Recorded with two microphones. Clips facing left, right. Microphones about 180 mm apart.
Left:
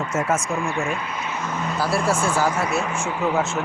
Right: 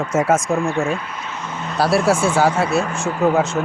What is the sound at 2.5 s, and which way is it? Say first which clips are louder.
Speech: right 5 dB; 30° right (ahead or behind).